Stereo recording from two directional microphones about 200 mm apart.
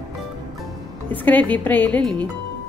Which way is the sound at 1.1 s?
10° left (ahead or behind).